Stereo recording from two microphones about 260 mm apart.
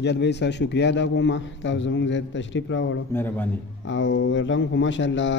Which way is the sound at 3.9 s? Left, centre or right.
Left.